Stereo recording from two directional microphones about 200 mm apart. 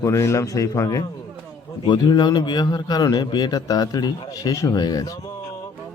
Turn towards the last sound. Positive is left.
turn(degrees=15)  # may be behind; listen again after turning